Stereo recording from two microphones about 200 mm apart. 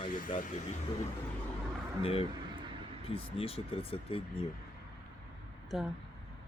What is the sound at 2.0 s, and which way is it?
Speech, 30° left (ahead or behind).